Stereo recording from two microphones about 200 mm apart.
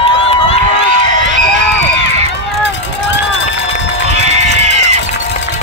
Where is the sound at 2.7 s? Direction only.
65° left (ahead or behind).